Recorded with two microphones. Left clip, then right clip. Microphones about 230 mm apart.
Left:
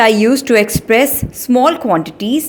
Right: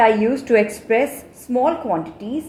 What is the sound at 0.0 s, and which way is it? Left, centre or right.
A woman's voice, left.